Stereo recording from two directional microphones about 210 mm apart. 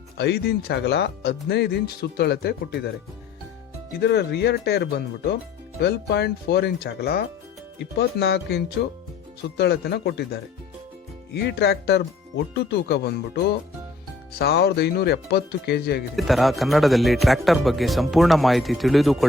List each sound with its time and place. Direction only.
0.2 s speech: 50° left (ahead or behind)
4.0 s speech: 50° left (ahead or behind)
16.1 s speech: centre (ahead or behind)